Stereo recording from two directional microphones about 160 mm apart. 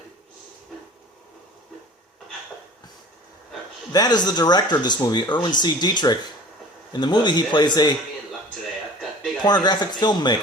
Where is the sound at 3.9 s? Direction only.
25° left (ahead or behind).